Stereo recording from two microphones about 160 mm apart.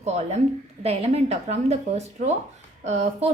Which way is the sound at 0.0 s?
45° right (ahead or behind).